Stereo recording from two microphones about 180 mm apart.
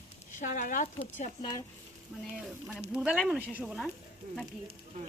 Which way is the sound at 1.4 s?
20° left (ahead or behind).